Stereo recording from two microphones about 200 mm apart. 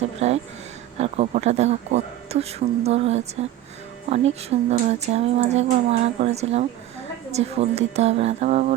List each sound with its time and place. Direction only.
0.2 s speech: 35° right (ahead or behind)